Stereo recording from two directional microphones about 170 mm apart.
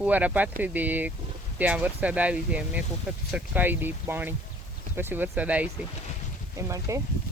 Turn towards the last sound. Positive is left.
turn(degrees=-15)  # may be behind; listen again after turning